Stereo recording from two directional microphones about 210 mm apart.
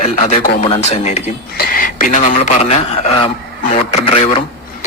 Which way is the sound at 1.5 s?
40° left (ahead or behind).